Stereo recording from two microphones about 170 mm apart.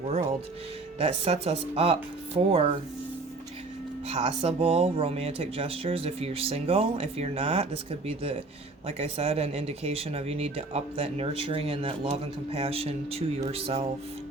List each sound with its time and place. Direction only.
0.0 s speech: 40° right (ahead or behind)
4.1 s speech: 40° right (ahead or behind)